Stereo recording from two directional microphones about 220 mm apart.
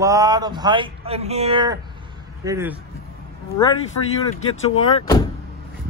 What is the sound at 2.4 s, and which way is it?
Speech, 10° right (ahead or behind).